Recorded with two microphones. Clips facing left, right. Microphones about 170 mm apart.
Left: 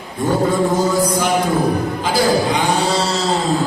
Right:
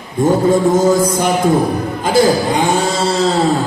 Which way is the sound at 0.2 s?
45° right (ahead or behind).